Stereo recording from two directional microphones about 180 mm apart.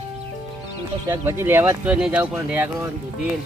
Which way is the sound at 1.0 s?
15° right (ahead or behind).